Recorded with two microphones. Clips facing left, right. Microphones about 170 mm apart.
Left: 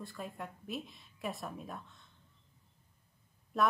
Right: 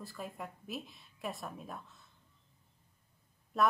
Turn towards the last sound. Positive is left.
turn(degrees=0)  # may be behind; listen again after turning